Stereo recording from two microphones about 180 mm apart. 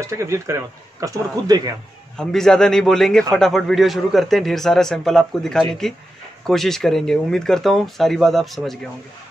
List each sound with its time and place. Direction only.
0.0 s a man's voice: 15° right (ahead or behind)
2.1 s a man's voice: 5° left (ahead or behind)